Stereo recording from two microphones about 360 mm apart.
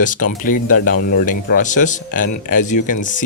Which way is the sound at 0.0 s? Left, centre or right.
Left.